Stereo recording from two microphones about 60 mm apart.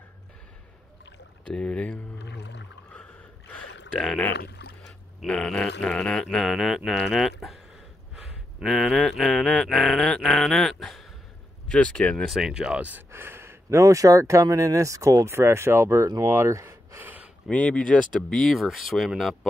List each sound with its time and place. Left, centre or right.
1.5 s speech: centre
5.2 s speech: centre
6.2 s speech: centre
8.6 s speech: centre
11.6 s speech: centre
12.3 s speech: centre
13.1 s speech: right
17.0 s a sound: right
17.5 s speech: centre
18.5 s speech: centre